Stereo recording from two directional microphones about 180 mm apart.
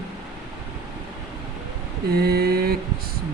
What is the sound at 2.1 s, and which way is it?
Mantra, 60° right (ahead or behind).